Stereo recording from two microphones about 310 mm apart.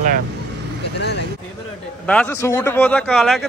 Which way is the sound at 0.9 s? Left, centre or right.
Left.